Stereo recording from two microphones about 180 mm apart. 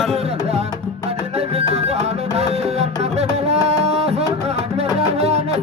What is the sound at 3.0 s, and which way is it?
Music, 35° right (ahead or behind).